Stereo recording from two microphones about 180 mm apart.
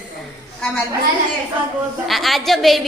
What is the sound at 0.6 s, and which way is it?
Speech, 5° left (ahead or behind).